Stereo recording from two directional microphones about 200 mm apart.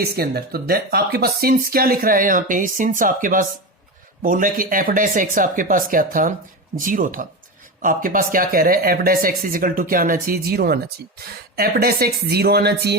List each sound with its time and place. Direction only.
0.0 s speech: 50° right (ahead or behind)